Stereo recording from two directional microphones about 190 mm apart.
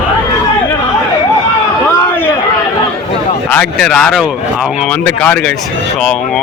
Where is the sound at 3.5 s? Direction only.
5° left (ahead or behind).